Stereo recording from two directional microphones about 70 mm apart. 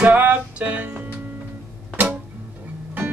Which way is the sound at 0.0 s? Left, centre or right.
Right.